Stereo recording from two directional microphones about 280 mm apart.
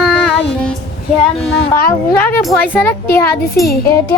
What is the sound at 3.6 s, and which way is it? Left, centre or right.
Speech, left.